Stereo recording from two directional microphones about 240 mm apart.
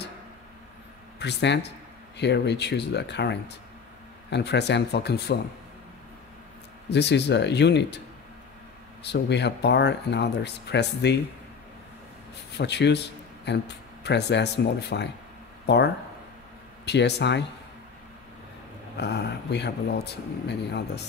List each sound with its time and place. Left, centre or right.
1.2 s speech: left
6.9 s speech: left
9.0 s speech: left
12.5 s speech: left
18.9 s speech: left